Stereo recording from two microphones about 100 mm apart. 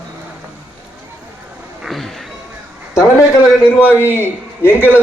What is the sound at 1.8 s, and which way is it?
Cat, centre (ahead or behind).